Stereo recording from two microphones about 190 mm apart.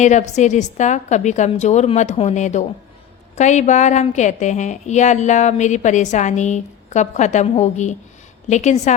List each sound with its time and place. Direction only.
0.0 s a woman's voice: 40° left (ahead or behind)